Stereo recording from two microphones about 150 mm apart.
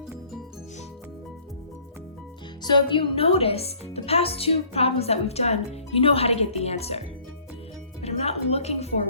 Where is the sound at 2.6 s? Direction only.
30° left (ahead or behind).